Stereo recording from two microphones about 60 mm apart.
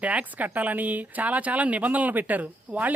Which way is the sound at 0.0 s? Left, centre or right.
Right.